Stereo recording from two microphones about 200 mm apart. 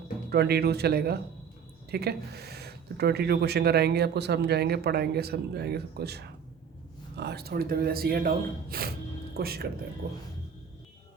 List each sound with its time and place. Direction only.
0.3 s speech: 55° right (ahead or behind)